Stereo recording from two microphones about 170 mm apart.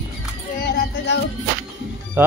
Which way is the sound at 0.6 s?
90° left.